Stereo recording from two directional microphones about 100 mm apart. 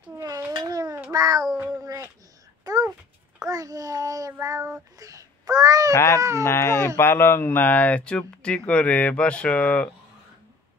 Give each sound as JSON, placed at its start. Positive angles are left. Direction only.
{"t": 0.5, "sound": "a sound", "side_deg": -45}
{"t": 1.1, "sound": "a child's voice", "side_deg": -35}
{"t": 2.6, "sound": "a sound", "side_deg": -35}
{"t": 3.4, "sound": "a child's voice", "side_deg": -35}
{"t": 4.9, "sound": "babbling", "side_deg": -35}
{"t": 6.1, "sound": "a child's voice", "side_deg": -30}
{"t": 6.4, "sound": "speech", "side_deg": 25}